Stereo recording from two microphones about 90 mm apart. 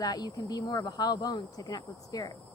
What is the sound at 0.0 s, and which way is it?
Speech, 45° left (ahead or behind).